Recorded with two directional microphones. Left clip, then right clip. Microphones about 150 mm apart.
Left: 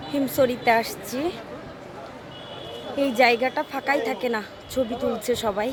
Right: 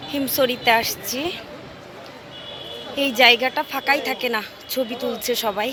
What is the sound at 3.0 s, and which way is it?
A woman's voice, 5° left (ahead or behind).